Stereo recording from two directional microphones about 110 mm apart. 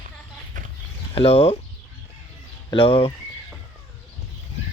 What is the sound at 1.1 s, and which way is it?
Speech, 60° left (ahead or behind).